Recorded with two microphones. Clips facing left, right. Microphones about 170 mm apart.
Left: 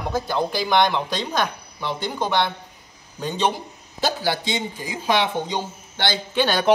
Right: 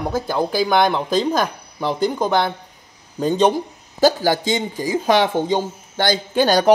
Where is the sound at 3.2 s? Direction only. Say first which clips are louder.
Right 7 dB; 45° right (ahead or behind).